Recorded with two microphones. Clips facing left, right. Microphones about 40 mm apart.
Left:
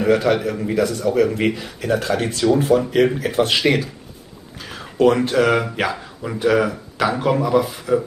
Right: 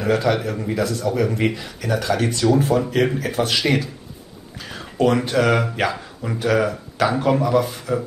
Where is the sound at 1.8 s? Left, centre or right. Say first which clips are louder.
Even; left.